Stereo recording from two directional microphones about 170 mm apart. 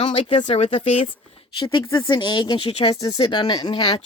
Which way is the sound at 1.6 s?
25° left (ahead or behind).